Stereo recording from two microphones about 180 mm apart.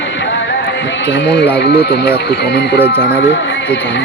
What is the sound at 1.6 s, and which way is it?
Speech, 70° left (ahead or behind).